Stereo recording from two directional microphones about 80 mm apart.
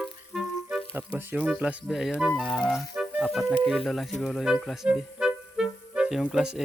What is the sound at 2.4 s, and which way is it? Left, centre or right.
Music, centre.